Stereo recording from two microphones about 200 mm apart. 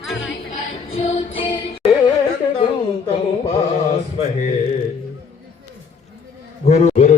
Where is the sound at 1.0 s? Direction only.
30° left (ahead or behind).